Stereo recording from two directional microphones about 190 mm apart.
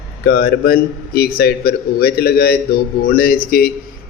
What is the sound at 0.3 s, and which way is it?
A man's voice, 55° left (ahead or behind).